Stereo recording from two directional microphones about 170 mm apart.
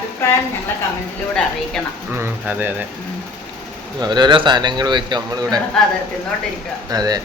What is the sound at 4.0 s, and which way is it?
A man's voice, 25° right (ahead or behind).